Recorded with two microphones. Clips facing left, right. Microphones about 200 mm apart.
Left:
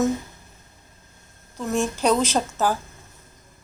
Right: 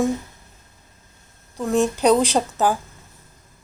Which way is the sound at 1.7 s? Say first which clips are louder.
Right 4 dB; 15° right (ahead or behind).